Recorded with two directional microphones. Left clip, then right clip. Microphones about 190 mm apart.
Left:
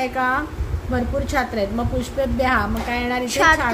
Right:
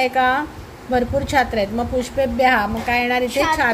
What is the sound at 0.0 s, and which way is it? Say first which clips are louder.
A woman's voice: right 4 dB; 20° right (ahead or behind).